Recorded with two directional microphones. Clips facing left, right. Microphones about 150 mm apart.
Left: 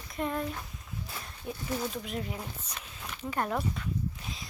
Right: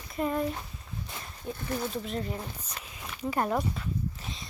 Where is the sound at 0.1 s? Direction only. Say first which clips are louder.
Right 3 dB; 5° right (ahead or behind).